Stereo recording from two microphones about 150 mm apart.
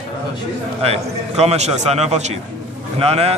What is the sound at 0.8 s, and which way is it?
A man's voice, 45° right (ahead or behind).